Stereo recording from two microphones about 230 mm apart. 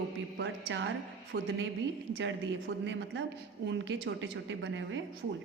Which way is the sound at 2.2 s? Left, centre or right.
Right.